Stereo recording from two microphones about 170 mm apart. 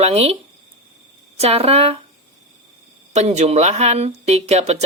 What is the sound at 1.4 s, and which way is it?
Speech, 35° right (ahead or behind).